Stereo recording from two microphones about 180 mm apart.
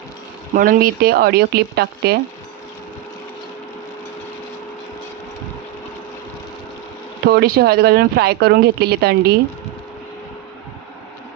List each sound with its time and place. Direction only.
0.5 s speech: 50° right (ahead or behind)
7.3 s speech: 60° right (ahead or behind)